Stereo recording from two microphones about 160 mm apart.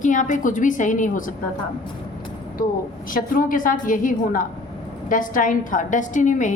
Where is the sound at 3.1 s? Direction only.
60° left (ahead or behind).